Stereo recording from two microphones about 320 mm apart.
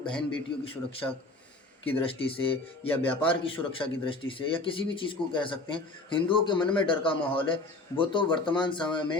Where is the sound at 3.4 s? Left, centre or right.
Centre.